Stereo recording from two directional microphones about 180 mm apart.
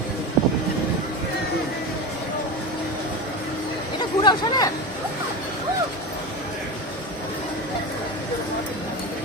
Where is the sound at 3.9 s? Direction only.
25° left (ahead or behind).